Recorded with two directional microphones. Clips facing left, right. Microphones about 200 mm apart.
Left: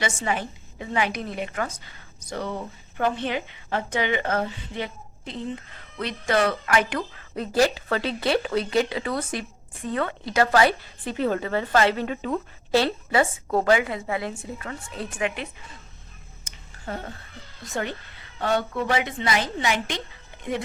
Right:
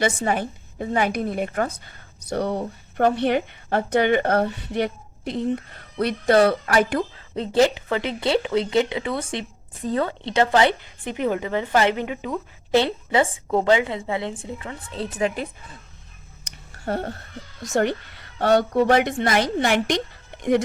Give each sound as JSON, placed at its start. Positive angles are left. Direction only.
{"t": 0.2, "sound": "a woman's voice", "side_deg": -45}
{"t": 1.7, "sound": "speech", "side_deg": -60}
{"t": 2.6, "sound": "speech", "side_deg": -40}
{"t": 3.2, "sound": "a woman's voice", "side_deg": -55}
{"t": 6.2, "sound": "speech", "side_deg": -35}
{"t": 17.6, "sound": "a woman's voice", "side_deg": -45}
{"t": 19.4, "sound": "a woman's voice", "side_deg": -60}